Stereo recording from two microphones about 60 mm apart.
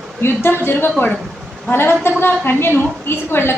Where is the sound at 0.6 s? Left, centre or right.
Left.